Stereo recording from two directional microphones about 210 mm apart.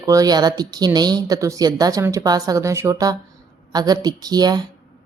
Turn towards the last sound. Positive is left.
turn(degrees=-20)  # may be behind; listen again after turning